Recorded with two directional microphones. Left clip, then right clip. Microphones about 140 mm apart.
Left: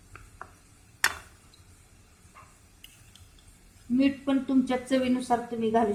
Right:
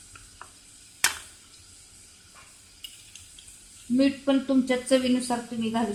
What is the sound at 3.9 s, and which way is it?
Speech, 20° right (ahead or behind).